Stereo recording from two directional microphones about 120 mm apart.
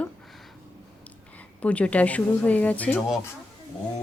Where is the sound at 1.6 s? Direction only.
10° left (ahead or behind).